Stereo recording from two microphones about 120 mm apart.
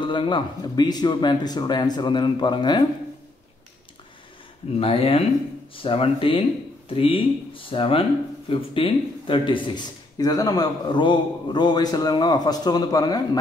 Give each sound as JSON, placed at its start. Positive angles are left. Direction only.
{"t": 0.0, "sound": "speech", "side_deg": 40}
{"t": 4.7, "sound": "speech", "side_deg": 55}